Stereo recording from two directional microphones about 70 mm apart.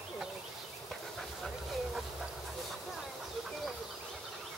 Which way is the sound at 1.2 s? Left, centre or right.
Centre.